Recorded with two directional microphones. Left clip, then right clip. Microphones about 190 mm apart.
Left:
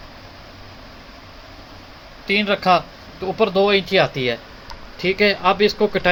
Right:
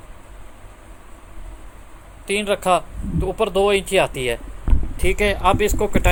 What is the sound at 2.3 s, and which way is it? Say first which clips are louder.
Speech: left 2 dB; 35° right (ahead or behind).